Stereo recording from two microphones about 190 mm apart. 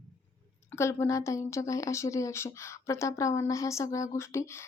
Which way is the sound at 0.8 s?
15° left (ahead or behind).